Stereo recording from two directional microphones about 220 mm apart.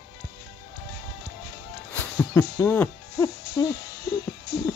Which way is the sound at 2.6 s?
10° left (ahead or behind).